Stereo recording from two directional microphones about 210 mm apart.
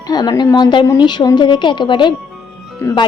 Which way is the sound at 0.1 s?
20° left (ahead or behind).